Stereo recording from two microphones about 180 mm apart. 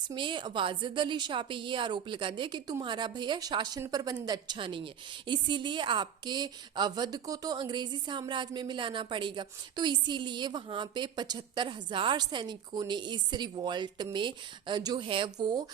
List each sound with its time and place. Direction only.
0.1 s a woman's voice: 25° right (ahead or behind)